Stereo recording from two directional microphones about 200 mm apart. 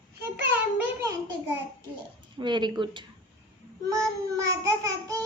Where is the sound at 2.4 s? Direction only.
20° right (ahead or behind).